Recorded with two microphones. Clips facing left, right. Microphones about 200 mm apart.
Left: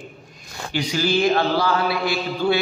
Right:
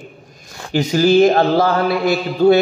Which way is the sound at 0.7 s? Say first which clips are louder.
Right 9 dB; 45° right (ahead or behind).